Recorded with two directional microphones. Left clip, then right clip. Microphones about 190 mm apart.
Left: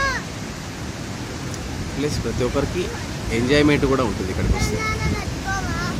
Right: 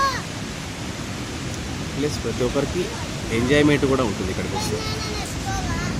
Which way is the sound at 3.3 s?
Centre (ahead or behind).